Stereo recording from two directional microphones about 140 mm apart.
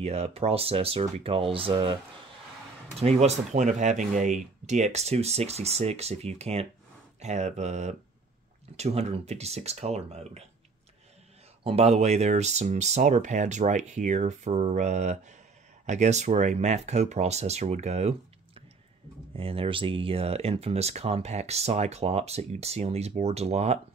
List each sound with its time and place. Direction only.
0.0 s speech: 45° right (ahead or behind)
3.0 s speech: 50° right (ahead or behind)
11.6 s speech: 45° right (ahead or behind)